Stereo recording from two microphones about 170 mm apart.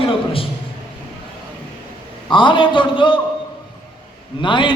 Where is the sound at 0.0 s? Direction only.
30° left (ahead or behind).